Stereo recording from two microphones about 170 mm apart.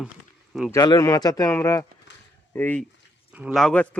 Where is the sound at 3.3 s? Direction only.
10° right (ahead or behind).